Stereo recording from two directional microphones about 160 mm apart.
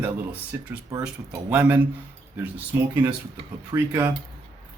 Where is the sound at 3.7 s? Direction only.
10° right (ahead or behind).